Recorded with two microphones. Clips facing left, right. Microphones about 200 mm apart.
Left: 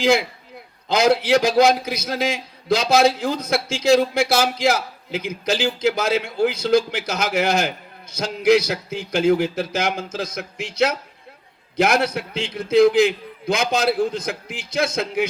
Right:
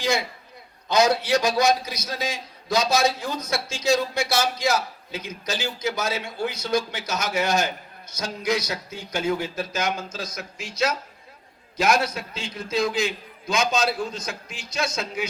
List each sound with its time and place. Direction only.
0.0 s a man's voice: 55° left (ahead or behind)